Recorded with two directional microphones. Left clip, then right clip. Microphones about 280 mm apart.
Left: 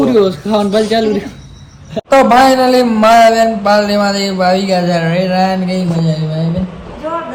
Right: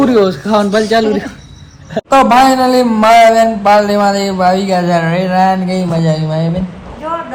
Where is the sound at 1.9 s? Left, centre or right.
Centre.